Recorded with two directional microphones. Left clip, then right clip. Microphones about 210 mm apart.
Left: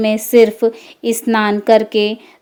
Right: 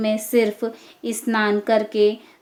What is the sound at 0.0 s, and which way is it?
A woman's voice, 30° left (ahead or behind).